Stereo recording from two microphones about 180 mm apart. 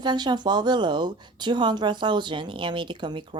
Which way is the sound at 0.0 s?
25° right (ahead or behind).